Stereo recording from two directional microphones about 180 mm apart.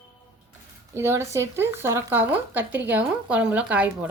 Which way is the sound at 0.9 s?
15° right (ahead or behind).